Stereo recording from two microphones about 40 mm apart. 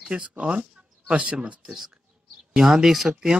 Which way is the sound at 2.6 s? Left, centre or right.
Centre.